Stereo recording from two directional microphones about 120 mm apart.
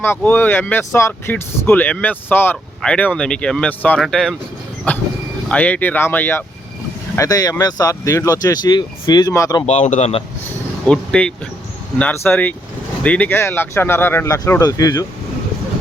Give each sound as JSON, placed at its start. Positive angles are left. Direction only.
{"t": 0.0, "sound": "speech", "side_deg": 15}
{"t": 4.9, "sound": "speech", "side_deg": 15}
{"t": 7.2, "sound": "speech", "side_deg": 30}
{"t": 9.3, "sound": "speech", "side_deg": 25}
{"t": 9.6, "sound": "a man's voice", "side_deg": 65}
{"t": 10.8, "sound": "speech", "side_deg": 10}